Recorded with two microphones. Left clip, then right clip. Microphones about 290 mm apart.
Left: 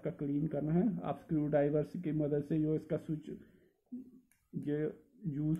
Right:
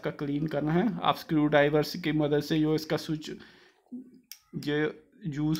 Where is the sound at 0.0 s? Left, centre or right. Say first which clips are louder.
Right 5 dB; right.